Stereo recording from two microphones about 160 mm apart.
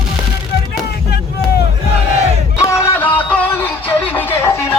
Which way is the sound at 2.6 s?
15° left (ahead or behind).